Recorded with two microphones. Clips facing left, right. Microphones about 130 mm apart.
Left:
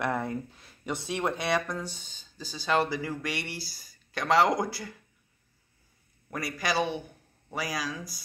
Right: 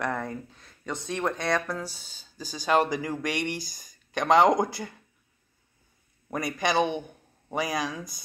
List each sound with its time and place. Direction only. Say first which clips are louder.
0.0 s speech: left 1 dB; 5° left (ahead or behind)
1.7 s speech: right 2 dB; 10° right (ahead or behind)
6.3 s a man's voice: right 4 dB; 20° right (ahead or behind)